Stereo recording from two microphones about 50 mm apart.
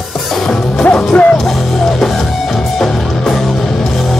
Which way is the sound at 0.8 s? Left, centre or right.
Left.